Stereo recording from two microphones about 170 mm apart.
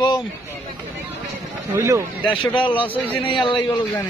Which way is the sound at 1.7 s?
15° right (ahead or behind).